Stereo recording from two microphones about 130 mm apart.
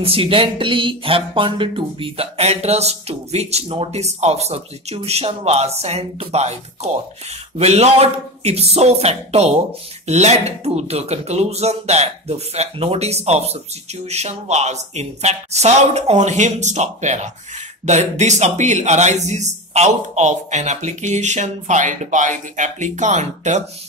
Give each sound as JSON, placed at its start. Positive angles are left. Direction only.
{"t": 0.0, "sound": "speech", "side_deg": -45}